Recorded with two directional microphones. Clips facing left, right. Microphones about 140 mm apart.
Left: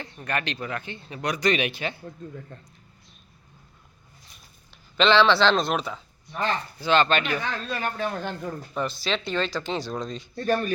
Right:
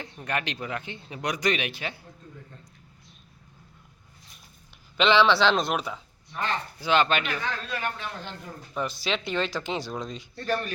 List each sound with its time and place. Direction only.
0.0 s a man's voice: 15° right (ahead or behind)
1.5 s speech: centre (ahead or behind)
4.9 s a man's voice: 10° right (ahead or behind)
7.7 s a man's voice: 40° left (ahead or behind)
9.0 s a man's voice: 15° right (ahead or behind)
10.3 s speech: 25° left (ahead or behind)